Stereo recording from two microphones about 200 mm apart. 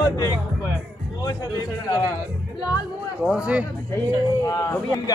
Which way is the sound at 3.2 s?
5° right (ahead or behind).